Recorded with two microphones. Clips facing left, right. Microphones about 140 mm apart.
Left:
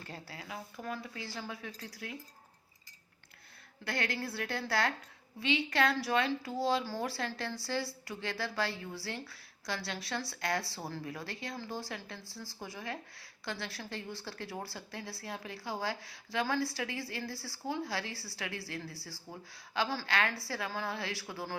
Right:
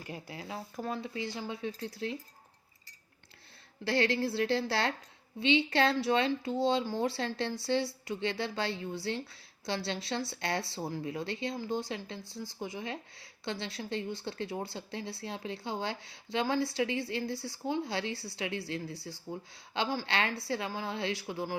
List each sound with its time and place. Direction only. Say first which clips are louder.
0.0 s speech: right 4 dB; 15° right (ahead or behind)
3.8 s speech: right 7 dB; 30° right (ahead or behind)